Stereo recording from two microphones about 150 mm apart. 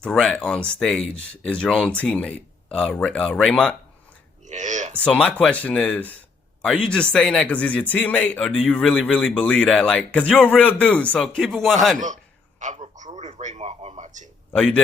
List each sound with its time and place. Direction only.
0.0 s speech: 5° left (ahead or behind)
4.4 s speech: 55° right (ahead or behind)
5.0 s speech: 5° left (ahead or behind)
11.9 s a sound: 55° right (ahead or behind)
14.5 s speech: 10° left (ahead or behind)